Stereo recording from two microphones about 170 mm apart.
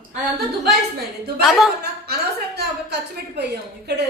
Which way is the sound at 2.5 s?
75° right (ahead or behind).